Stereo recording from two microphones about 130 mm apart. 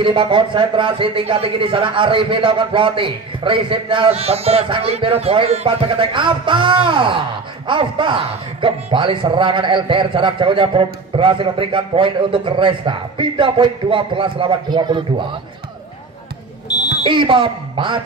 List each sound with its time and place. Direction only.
0.0 s a man's voice: 40° right (ahead or behind)
16.6 s smoke detector: 30° left (ahead or behind)
17.0 s a man's voice: 40° right (ahead or behind)